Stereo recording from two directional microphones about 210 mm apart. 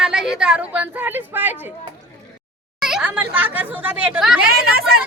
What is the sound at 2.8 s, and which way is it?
Speech, 5° right (ahead or behind).